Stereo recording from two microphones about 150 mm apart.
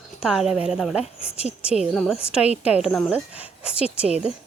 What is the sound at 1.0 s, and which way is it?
Speech, 45° left (ahead or behind).